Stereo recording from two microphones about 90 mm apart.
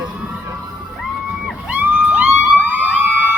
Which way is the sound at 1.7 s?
20° right (ahead or behind).